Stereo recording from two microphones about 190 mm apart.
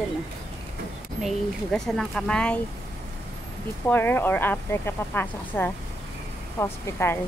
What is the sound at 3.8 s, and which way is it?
Speech, 10° left (ahead or behind).